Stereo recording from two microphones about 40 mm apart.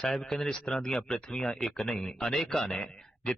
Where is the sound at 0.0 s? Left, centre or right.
Centre.